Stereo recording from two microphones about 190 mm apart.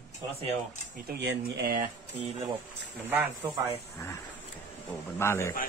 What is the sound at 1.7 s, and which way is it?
Speech, 40° right (ahead or behind).